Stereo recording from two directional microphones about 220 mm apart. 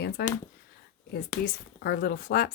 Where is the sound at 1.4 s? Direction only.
45° left (ahead or behind).